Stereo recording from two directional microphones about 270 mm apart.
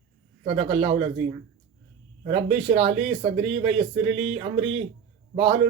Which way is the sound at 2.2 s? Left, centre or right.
Right.